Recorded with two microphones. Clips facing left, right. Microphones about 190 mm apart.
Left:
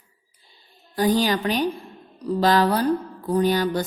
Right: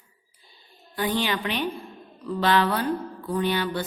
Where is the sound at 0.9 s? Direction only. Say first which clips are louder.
Left 6 dB; 40° left (ahead or behind).